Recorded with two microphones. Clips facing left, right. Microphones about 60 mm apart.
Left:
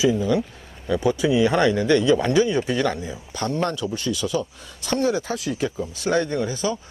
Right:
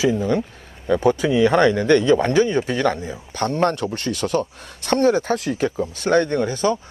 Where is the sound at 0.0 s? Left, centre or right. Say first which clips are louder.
Right 1 dB; right.